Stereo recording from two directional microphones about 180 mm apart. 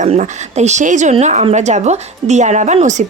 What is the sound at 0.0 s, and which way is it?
A woman's voice, 40° right (ahead or behind).